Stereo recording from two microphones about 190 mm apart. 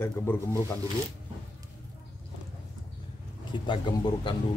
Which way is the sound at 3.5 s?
25° left (ahead or behind).